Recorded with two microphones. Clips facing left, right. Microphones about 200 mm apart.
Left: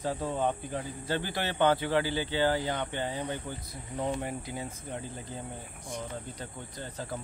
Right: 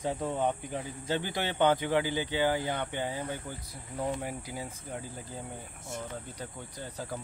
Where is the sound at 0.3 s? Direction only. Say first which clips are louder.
Even; 15° right (ahead or behind).